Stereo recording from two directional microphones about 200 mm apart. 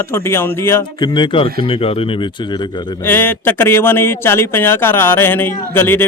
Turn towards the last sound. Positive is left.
turn(degrees=10)  # may be behind; listen again after turning